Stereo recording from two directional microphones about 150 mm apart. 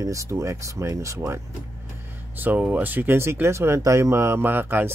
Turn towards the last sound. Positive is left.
turn(degrees=-15)  # may be behind; listen again after turning